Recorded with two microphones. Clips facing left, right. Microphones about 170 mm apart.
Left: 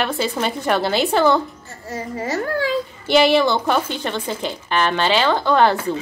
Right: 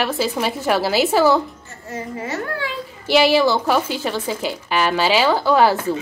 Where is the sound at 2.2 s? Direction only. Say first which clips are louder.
Left 5 dB; 40° left (ahead or behind).